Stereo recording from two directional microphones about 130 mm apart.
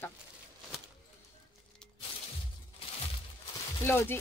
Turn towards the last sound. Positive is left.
turn(degrees=15)  # may be behind; listen again after turning